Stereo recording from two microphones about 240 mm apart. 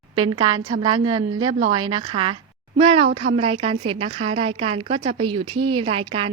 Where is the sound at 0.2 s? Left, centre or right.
Centre.